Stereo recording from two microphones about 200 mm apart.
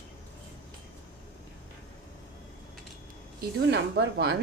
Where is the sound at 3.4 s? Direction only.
60° right (ahead or behind).